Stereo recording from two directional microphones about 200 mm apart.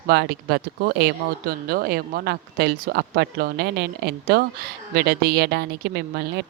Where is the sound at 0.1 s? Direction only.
55° right (ahead or behind).